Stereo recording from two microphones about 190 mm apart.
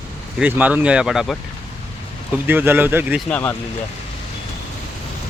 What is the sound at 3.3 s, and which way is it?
Speech, 15° left (ahead or behind).